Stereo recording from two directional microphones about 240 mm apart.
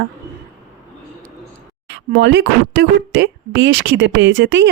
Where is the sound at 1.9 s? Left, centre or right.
Right.